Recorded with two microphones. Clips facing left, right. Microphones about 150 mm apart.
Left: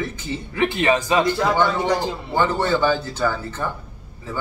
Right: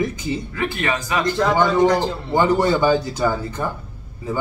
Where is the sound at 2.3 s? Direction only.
15° right (ahead or behind).